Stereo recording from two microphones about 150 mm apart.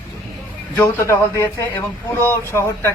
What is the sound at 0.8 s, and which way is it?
Speech, 15° left (ahead or behind).